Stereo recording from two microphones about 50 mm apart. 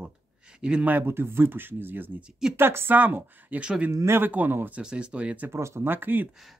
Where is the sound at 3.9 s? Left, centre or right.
Right.